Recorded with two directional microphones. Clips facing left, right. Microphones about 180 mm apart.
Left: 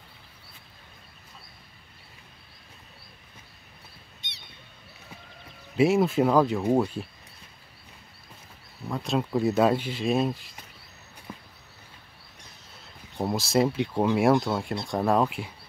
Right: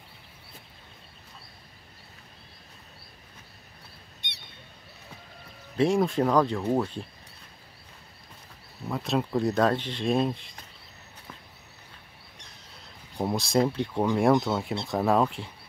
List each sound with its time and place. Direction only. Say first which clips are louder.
4.2 s bird: right 5 dB; 60° right (ahead or behind)
5.8 s speech: left 2 dB; 5° left (ahead or behind)
8.8 s speech: even; centre (ahead or behind)
11.3 s a sound: left 5 dB; 15° left (ahead or behind)
13.1 s speech: even; centre (ahead or behind)